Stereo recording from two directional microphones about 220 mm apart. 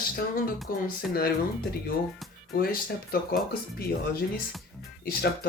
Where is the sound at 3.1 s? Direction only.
45° left (ahead or behind).